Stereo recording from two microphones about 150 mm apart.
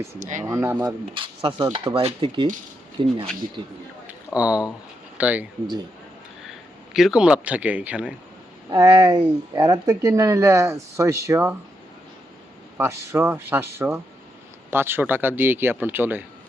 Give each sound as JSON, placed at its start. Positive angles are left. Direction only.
{"t": 0.2, "sound": "speech", "side_deg": -55}
{"t": 0.4, "sound": "speech", "side_deg": -15}
{"t": 0.9, "sound": "speech", "side_deg": -35}
{"t": 4.4, "sound": "speech", "side_deg": -10}
{"t": 6.9, "sound": "speech", "side_deg": -5}
{"t": 8.7, "sound": "speech", "side_deg": -30}
{"t": 12.7, "sound": "speech", "side_deg": -15}